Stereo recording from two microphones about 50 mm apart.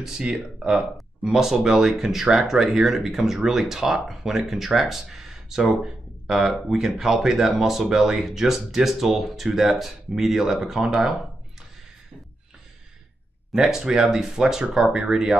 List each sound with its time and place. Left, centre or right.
0.0 s speech: centre
13.5 s speech: centre